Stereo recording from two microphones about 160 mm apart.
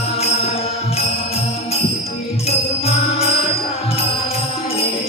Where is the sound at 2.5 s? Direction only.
40° left (ahead or behind).